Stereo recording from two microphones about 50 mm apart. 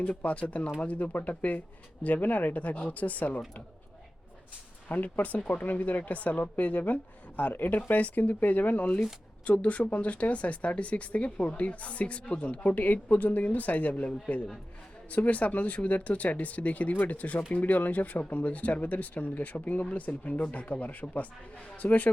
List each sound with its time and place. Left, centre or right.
0.2 s a woman's voice: left
4.9 s a woman's voice: left